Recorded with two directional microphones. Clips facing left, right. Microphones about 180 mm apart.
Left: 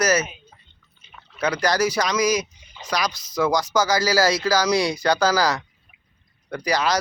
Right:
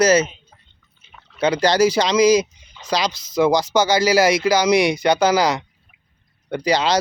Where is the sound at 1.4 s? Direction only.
25° right (ahead or behind).